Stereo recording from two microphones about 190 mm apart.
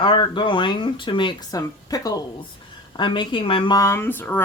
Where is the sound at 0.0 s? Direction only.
25° left (ahead or behind).